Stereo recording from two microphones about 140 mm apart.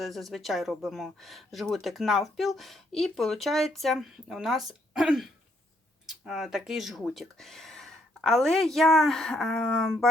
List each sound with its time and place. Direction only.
0.0 s speech: centre (ahead or behind)